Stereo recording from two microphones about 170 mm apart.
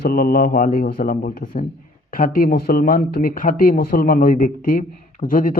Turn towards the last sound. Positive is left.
turn(degrees=55)  # may be behind; listen again after turning